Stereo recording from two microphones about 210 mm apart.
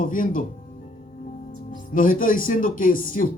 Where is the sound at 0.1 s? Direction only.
40° left (ahead or behind).